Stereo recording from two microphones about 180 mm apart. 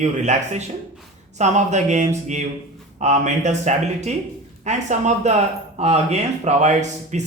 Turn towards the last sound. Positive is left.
turn(degrees=-40)  # may be behind; listen again after turning